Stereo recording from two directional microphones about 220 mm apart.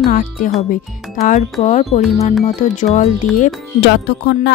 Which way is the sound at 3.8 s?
50° left (ahead or behind).